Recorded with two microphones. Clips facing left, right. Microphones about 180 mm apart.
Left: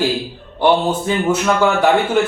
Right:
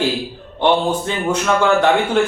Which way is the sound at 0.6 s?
5° left (ahead or behind).